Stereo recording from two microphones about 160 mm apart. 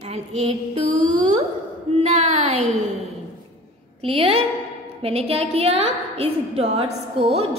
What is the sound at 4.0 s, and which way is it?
A woman's voice, 35° right (ahead or behind).